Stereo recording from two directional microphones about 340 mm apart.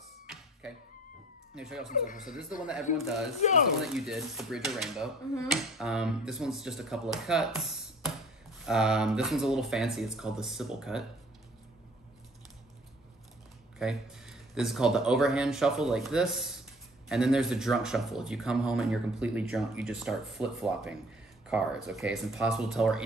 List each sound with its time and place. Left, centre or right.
0.3 s a sound: centre
1.5 s speech: centre
2.0 s speech: left
2.6 s speech: centre
13.7 s speech: centre